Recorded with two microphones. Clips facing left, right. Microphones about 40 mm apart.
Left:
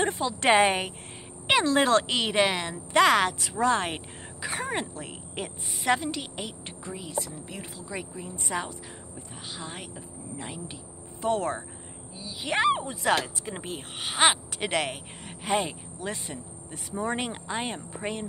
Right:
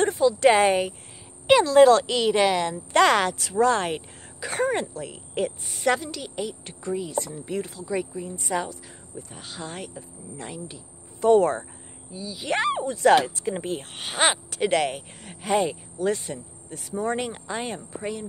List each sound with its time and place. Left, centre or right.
0.0 s speech: left
3.3 s speech: centre
4.9 s speech: left
5.4 s speech: centre
6.0 s speech: left
6.9 s speech: centre
7.6 s speech: centre
11.2 s speech: centre
12.1 s speech: centre